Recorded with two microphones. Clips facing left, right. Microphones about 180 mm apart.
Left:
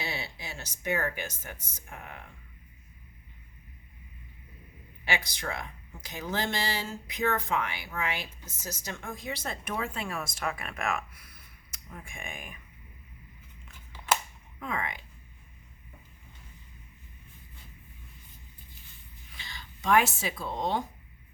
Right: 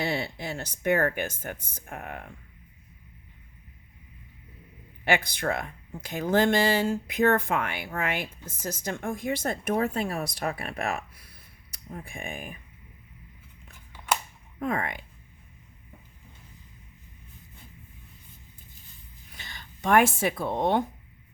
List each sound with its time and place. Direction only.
0.0 s speech: 55° right (ahead or behind)
5.0 s speech: 55° right (ahead or behind); by 12.5 s 35° right (ahead or behind)
14.6 s speech: 50° right (ahead or behind)
19.4 s speech: 50° right (ahead or behind)